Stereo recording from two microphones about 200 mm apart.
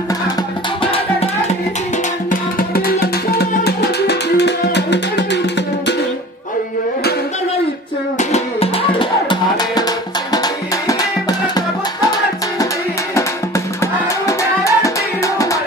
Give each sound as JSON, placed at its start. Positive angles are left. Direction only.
{"t": 0.9, "sound": "music", "side_deg": 30}
{"t": 2.7, "sound": "music", "side_deg": 50}
{"t": 8.2, "sound": "music", "side_deg": 30}
{"t": 14.2, "sound": "music", "side_deg": 15}